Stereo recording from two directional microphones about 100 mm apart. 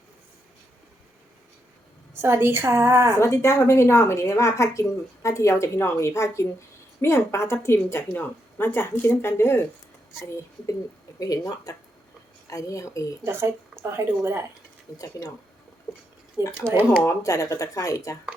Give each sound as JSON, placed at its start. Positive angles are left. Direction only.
{"t": 2.1, "sound": "a woman's voice", "side_deg": -25}
{"t": 3.2, "sound": "a woman's voice", "side_deg": 30}
{"t": 11.2, "sound": "speech", "side_deg": 35}
{"t": 13.2, "sound": "a woman's voice", "side_deg": -25}
{"t": 14.9, "sound": "speech", "side_deg": 35}
{"t": 16.4, "sound": "a woman's voice", "side_deg": -30}
{"t": 17.1, "sound": "speech", "side_deg": 35}